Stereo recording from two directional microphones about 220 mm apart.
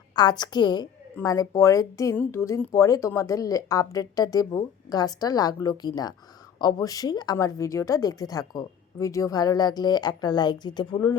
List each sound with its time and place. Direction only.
0.2 s a woman's voice: 20° left (ahead or behind)